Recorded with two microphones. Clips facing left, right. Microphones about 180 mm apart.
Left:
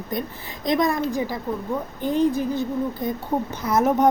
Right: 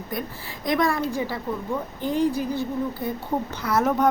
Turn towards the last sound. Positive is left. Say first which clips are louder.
# left 2 dB
turn(degrees=15)  # may be behind; listen again after turning